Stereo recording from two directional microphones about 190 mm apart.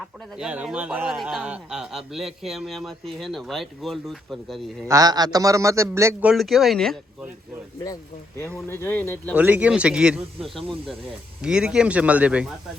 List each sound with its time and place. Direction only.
0.3 s a man's voice: 5° right (ahead or behind)
4.9 s a man's voice: 20° right (ahead or behind); by 7.0 s centre (ahead or behind)
8.7 s speech: 10° left (ahead or behind)
9.3 s a man's voice: 10° right (ahead or behind)